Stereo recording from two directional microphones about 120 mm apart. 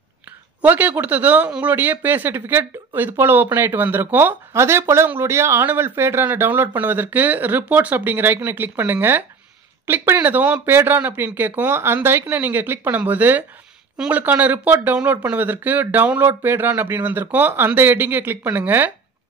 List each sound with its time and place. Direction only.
0.6 s speech: 15° right (ahead or behind)